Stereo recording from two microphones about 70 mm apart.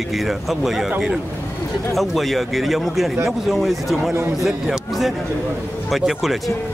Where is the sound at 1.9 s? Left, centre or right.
Centre.